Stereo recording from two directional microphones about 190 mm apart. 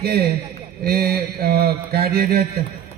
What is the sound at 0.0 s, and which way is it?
Mantra, 55° right (ahead or behind).